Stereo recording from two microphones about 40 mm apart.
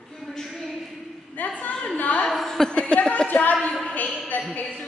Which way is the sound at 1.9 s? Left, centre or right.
Left.